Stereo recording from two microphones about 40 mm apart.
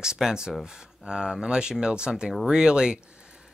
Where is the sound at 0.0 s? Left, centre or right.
Centre.